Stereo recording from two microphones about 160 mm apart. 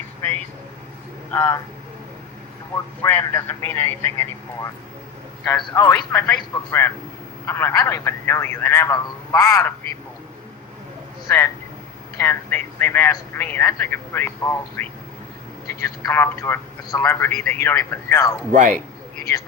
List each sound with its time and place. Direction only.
1.3 s speech: 20° left (ahead or behind)
3.0 s speech: 15° left (ahead or behind)
11.3 s speech: 15° left (ahead or behind)
18.5 s speech: 55° right (ahead or behind)